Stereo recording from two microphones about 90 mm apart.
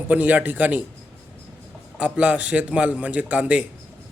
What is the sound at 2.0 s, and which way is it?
A man's voice, 15° right (ahead or behind).